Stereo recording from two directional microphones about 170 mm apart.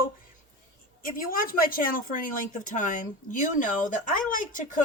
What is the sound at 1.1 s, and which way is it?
Speech, 55° left (ahead or behind).